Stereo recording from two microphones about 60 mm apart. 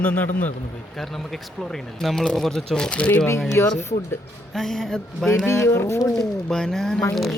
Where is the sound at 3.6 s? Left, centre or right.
Left.